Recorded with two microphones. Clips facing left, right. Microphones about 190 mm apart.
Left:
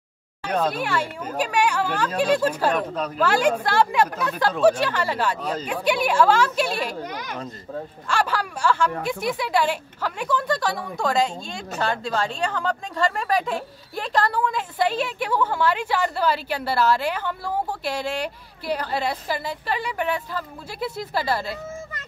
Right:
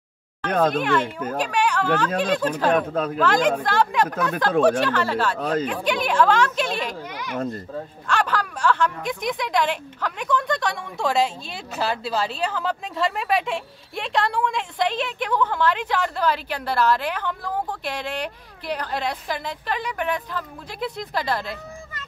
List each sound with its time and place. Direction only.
0.5 s speech: 50° right (ahead or behind)
0.7 s a woman's voice: 10° left (ahead or behind)
2.7 s speech: 50° right (ahead or behind)
3.2 s a woman's voice: 10° left (ahead or behind)
5.4 s speech: 55° right (ahead or behind)
5.7 s a woman's voice: 10° left (ahead or behind)
7.0 s speech: 40° left (ahead or behind)
8.1 s a woman's voice: 10° left (ahead or behind)